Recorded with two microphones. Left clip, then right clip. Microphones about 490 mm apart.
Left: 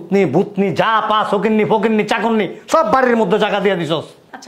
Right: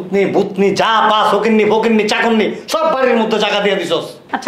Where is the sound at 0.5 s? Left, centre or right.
Left.